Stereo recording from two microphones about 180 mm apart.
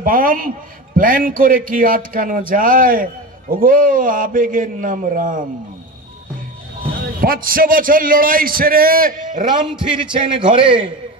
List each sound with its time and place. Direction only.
0.0 s speech: 50° right (ahead or behind)
7.2 s speech: 55° right (ahead or behind)
10.1 s a man's voice: 30° right (ahead or behind)